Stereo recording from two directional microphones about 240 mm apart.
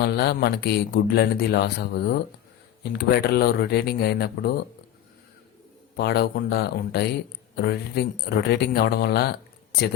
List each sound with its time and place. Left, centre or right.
0.0 s speech: left
6.0 s speech: left